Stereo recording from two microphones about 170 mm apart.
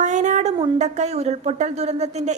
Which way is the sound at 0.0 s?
45° right (ahead or behind).